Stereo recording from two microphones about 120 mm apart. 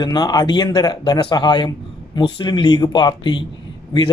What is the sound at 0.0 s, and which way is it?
Speech, 35° left (ahead or behind).